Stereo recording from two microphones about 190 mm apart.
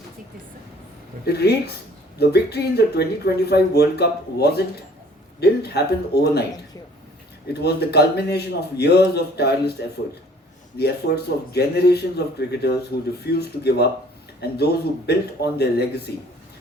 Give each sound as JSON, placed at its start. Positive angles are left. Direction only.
{"t": 1.2, "sound": "speech", "side_deg": 55}
{"t": 7.4, "sound": "speech", "side_deg": 60}
{"t": 10.8, "sound": "speech", "side_deg": 60}